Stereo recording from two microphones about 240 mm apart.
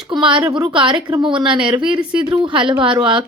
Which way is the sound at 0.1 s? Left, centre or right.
Centre.